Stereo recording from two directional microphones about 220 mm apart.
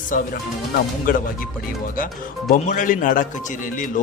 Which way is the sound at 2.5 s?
35° left (ahead or behind).